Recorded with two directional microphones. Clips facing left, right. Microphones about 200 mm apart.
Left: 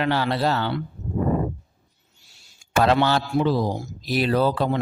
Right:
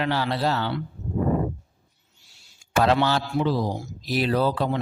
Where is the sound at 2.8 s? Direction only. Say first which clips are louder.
Left 2 dB; 60° left (ahead or behind).